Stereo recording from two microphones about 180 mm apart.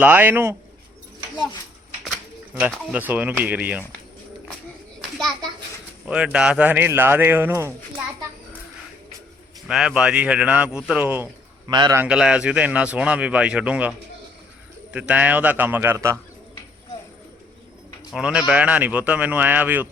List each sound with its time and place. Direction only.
0.0 s speech: 10° right (ahead or behind)
2.6 s speech: 10° right (ahead or behind)
4.9 s children playing: centre (ahead or behind)
6.1 s speech: 5° right (ahead or behind)
9.6 s speech: 5° right (ahead or behind)
11.7 s a man's voice: 25° right (ahead or behind)
11.9 s speech: 5° right (ahead or behind)
14.9 s speech: 10° right (ahead or behind)
18.1 s speech: 5° right (ahead or behind)